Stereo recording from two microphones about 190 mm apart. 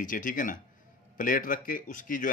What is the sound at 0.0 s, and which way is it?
Speech, 45° left (ahead or behind).